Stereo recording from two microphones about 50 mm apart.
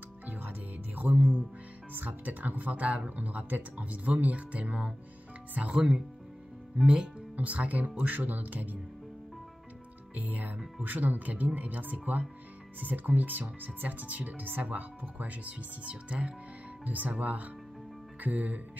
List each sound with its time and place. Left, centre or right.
0.3 s music: right
2.0 s speech: right; by 6.0 s centre
7.3 s speech: right
10.1 s speech: right
16.8 s speech: right